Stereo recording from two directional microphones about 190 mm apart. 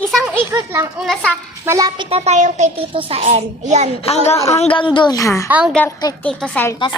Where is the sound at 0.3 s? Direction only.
15° right (ahead or behind).